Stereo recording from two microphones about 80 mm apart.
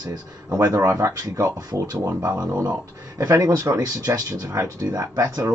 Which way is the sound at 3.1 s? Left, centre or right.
Right.